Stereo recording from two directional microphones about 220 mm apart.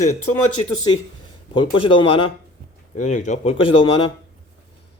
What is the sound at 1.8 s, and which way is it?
Speech, 25° left (ahead or behind).